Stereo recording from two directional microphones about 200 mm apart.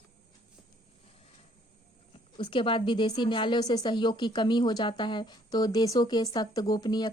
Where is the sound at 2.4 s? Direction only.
25° left (ahead or behind).